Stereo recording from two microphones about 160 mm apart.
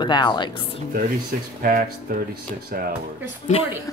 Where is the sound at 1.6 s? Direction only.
65° right (ahead or behind).